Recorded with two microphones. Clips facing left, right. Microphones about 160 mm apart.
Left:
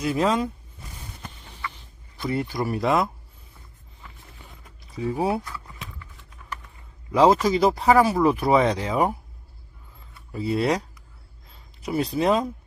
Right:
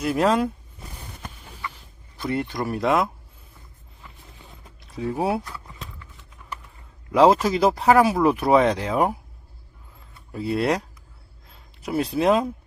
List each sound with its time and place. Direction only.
0.0 s speech: centre (ahead or behind)
1.7 s speech: centre (ahead or behind)
4.8 s speech: centre (ahead or behind)
7.1 s speech: 5° right (ahead or behind)
10.3 s speech: centre (ahead or behind)
11.4 s a sound: centre (ahead or behind)